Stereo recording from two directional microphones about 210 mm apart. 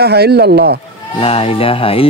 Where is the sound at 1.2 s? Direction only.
25° left (ahead or behind).